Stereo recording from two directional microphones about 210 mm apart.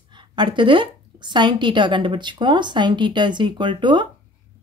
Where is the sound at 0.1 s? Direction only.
20° right (ahead or behind).